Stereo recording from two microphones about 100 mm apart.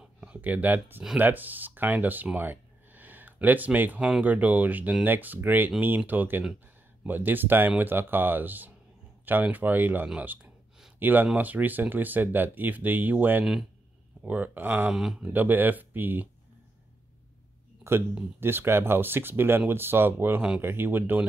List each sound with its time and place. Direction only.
0.0 s speech: 10° right (ahead or behind)
14.9 s speech: 5° right (ahead or behind)
15.3 s speech: 20° right (ahead or behind)
18.4 s speech: 25° right (ahead or behind)